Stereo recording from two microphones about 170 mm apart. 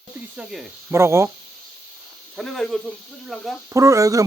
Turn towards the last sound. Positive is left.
turn(degrees=-20)  # may be behind; listen again after turning